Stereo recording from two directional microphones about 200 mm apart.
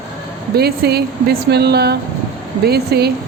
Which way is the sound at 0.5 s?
50° right (ahead or behind).